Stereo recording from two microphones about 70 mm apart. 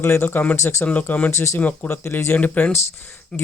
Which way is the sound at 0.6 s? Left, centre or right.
Left.